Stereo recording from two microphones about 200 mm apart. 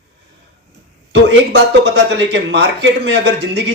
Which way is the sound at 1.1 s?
60° right (ahead or behind).